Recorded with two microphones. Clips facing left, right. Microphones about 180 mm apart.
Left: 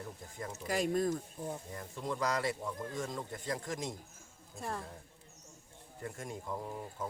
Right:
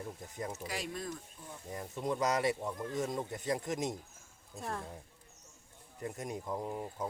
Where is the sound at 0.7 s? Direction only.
45° left (ahead or behind).